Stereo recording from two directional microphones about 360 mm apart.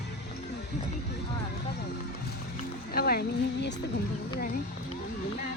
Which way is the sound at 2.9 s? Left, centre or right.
Left.